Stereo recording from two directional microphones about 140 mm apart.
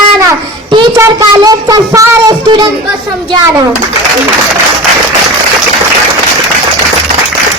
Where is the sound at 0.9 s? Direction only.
25° right (ahead or behind).